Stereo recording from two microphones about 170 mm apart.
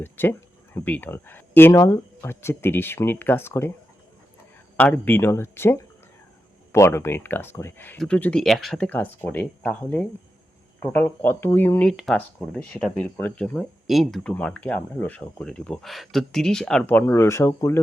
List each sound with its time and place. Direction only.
0.0 s speech: 10° left (ahead or behind)
4.8 s speech: 10° left (ahead or behind)